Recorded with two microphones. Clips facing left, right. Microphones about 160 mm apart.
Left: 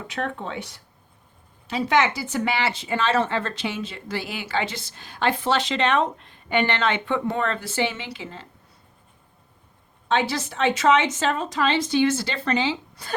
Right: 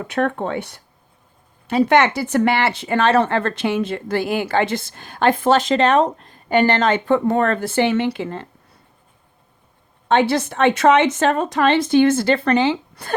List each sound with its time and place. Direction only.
0.0 s a woman's voice: 55° right (ahead or behind)
10.1 s a woman's voice: 55° right (ahead or behind)